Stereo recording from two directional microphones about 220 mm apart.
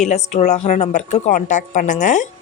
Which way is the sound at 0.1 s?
30° left (ahead or behind).